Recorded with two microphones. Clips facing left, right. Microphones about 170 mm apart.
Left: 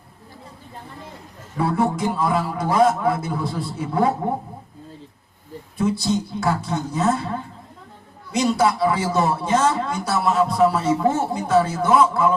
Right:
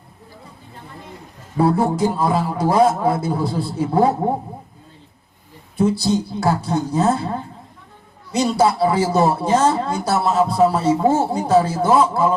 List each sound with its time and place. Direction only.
1.5 s a man's voice: 30° right (ahead or behind)
5.7 s a man's voice: 30° right (ahead or behind)
8.4 s a man's voice: 30° right (ahead or behind)